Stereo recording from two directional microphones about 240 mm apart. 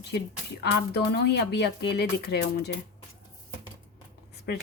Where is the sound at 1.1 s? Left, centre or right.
Left.